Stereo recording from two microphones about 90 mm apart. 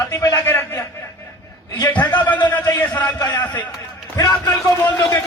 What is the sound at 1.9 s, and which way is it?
A man's voice, 20° left (ahead or behind).